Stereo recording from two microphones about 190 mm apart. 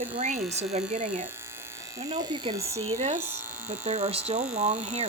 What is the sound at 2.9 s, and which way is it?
Speech, 40° right (ahead or behind).